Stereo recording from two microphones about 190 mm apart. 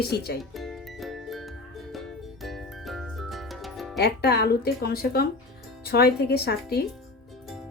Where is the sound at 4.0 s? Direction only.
60° left (ahead or behind).